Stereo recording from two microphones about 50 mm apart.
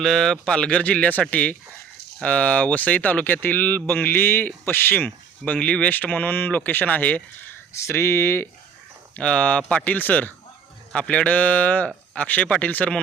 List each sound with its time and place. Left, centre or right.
0.0 s speech: centre; by 5.0 s left
5.0 s speech: left
5.9 s speech: left
7.8 s speech: left
9.1 s speech: left
10.9 s speech: left